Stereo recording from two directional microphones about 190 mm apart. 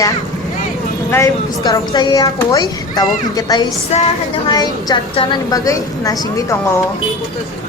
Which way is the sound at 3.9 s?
35° left (ahead or behind).